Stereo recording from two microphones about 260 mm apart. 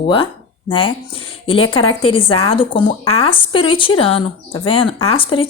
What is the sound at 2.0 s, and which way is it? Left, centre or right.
A woman's voice, left.